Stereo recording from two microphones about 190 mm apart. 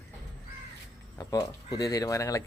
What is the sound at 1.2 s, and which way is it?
Speech, 20° left (ahead or behind).